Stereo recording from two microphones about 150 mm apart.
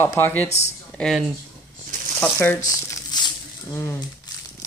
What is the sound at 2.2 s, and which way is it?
Speech, 15° left (ahead or behind).